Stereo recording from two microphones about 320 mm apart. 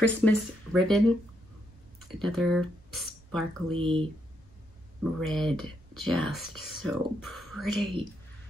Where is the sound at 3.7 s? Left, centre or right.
Centre.